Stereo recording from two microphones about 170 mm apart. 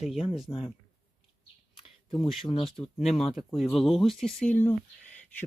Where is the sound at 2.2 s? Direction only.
Centre (ahead or behind).